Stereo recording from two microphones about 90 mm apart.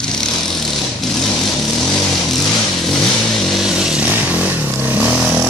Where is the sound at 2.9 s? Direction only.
Centre (ahead or behind).